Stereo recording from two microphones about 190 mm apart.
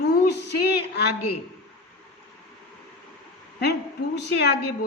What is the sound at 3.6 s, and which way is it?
Speech, 60° left (ahead or behind).